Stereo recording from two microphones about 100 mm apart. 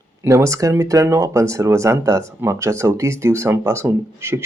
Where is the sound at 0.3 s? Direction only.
30° right (ahead or behind).